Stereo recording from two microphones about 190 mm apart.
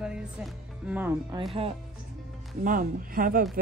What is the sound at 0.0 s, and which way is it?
Music, 5° right (ahead or behind).